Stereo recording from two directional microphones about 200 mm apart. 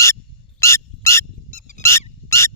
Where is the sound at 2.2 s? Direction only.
15° left (ahead or behind).